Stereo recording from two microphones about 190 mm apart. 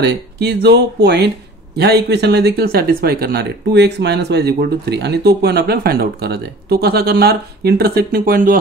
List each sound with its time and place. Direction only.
0.0 s speech: 60° right (ahead or behind)